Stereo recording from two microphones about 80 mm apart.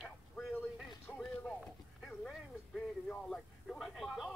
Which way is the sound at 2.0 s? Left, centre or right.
Centre.